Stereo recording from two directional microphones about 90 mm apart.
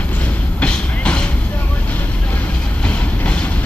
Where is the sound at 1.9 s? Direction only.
20° left (ahead or behind).